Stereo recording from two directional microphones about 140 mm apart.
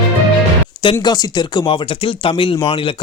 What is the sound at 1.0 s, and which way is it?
Speech, 30° left (ahead or behind).